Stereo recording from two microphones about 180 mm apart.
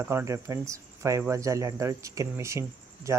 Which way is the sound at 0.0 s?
15° right (ahead or behind).